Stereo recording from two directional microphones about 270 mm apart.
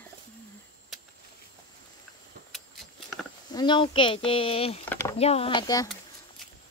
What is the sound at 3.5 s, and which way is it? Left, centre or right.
A woman's voice, centre.